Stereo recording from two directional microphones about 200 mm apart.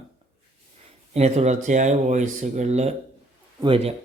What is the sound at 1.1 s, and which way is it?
Speech, 35° right (ahead or behind).